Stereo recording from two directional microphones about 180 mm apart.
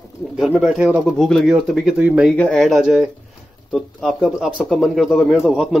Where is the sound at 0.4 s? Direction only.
5° right (ahead or behind).